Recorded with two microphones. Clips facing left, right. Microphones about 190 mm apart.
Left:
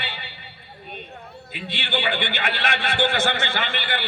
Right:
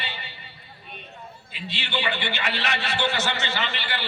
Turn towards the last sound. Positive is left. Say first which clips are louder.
# left 3 dB
turn(degrees=55)  # may be behind; listen again after turning